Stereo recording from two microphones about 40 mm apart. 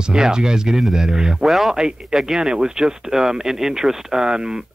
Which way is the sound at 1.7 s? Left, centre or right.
Centre.